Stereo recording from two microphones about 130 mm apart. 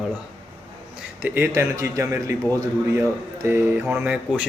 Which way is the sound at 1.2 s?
15° right (ahead or behind).